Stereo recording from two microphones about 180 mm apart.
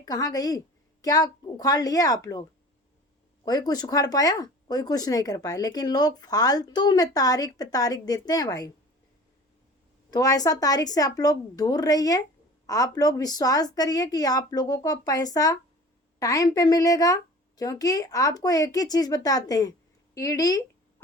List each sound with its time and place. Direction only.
0.0 s speech: 20° left (ahead or behind)
3.4 s speech: 20° left (ahead or behind)
10.1 s speech: 20° left (ahead or behind)